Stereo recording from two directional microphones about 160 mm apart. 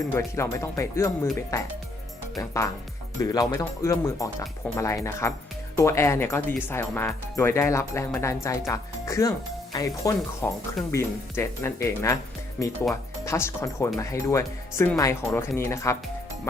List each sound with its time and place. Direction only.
0.1 s speech: 15° left (ahead or behind)